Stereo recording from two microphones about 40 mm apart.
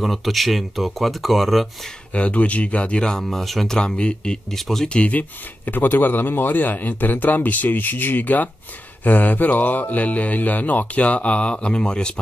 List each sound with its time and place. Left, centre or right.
0.0 s speech: centre
2.1 s speech: left
3.0 s speech: centre
3.3 s speech: centre
3.7 s speech: left
4.5 s speech: centre
4.8 s speech: left
5.7 s a man's voice: left